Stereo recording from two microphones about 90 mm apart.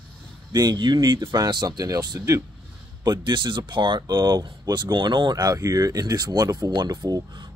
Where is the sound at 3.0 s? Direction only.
55° right (ahead or behind).